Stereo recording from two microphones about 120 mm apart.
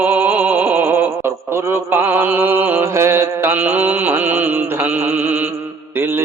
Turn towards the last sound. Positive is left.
turn(degrees=-15)  # may be behind; listen again after turning